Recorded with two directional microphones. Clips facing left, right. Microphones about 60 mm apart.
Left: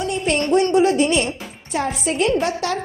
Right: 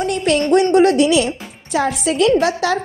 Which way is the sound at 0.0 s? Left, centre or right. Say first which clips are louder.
Right 4 dB; right.